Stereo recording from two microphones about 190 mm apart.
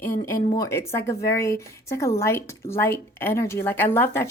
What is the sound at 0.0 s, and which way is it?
A woman's voice, 10° left (ahead or behind).